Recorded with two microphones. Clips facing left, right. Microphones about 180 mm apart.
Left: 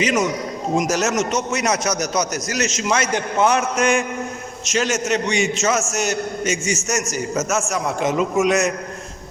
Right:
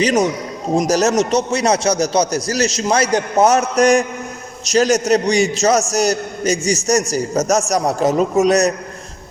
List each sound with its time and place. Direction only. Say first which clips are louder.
0.0 s a man's voice: right 4 dB; 35° right (ahead or behind)